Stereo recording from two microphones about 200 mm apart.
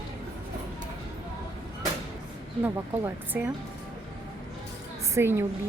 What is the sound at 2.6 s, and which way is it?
Speech, 10° right (ahead or behind).